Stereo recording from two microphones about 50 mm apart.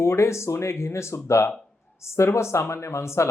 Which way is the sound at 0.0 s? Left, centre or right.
Left.